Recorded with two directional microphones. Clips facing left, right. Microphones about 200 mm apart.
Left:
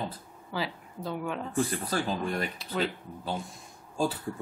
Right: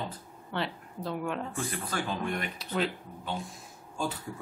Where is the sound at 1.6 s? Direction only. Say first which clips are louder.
Left 5 dB; 35° left (ahead or behind).